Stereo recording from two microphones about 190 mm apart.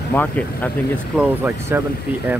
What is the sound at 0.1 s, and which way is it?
Speech, 10° left (ahead or behind).